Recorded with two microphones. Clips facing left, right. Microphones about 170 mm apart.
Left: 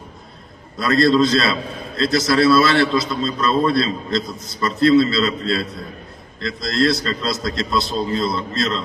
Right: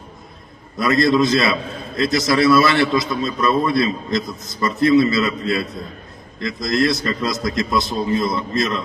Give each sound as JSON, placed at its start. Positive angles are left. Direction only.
{"t": 0.7, "sound": "a man's voice", "side_deg": -20}